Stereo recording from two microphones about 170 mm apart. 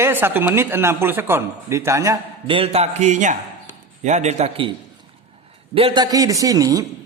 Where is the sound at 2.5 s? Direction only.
35° right (ahead or behind).